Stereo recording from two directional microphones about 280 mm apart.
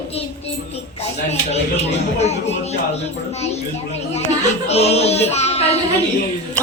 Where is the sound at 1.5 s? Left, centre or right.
Left.